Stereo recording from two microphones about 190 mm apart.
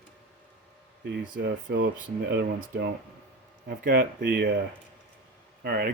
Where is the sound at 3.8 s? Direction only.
55° right (ahead or behind).